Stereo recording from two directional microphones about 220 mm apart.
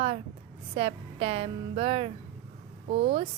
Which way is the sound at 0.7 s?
25° right (ahead or behind).